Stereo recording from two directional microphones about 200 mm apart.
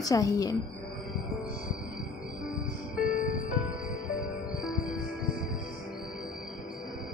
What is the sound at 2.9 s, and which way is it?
Music, 5° right (ahead or behind).